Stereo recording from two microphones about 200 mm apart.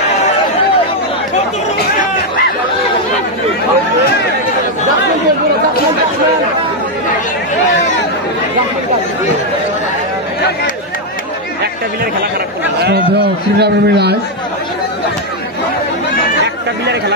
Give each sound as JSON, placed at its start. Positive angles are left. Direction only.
{"t": 13.6, "sound": "a man's voice", "side_deg": -55}